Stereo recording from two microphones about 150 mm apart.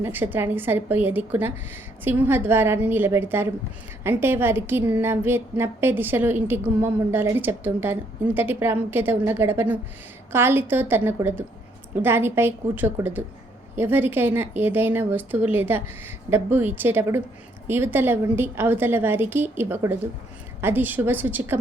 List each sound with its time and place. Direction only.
0.0 s a woman's voice: 15° right (ahead or behind)